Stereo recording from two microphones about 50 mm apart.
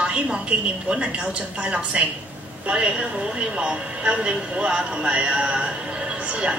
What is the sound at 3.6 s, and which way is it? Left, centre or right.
Speech, right.